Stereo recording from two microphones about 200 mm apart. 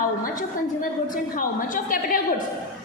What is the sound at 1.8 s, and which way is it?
Speech, 45° left (ahead or behind).